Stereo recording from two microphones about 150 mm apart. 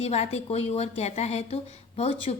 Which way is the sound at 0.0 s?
45° left (ahead or behind).